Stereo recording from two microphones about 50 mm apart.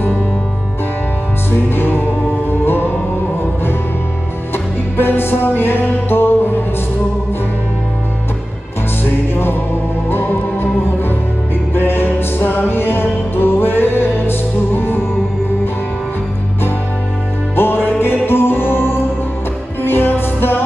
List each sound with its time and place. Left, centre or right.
1.5 s music: left
4.9 s music: left
9.3 s music: left
17.6 s music: left